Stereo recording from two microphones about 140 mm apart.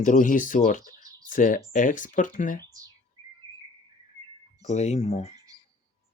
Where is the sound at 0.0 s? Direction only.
70° left (ahead or behind).